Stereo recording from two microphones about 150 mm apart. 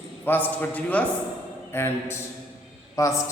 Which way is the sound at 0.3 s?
10° left (ahead or behind).